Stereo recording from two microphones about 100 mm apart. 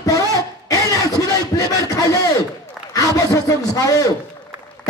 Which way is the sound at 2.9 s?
35° left (ahead or behind).